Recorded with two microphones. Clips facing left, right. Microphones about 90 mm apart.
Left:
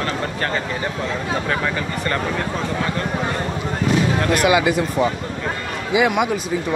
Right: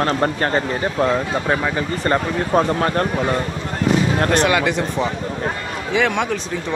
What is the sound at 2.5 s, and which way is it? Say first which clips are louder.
Speech: right 6 dB; 45° right (ahead or behind).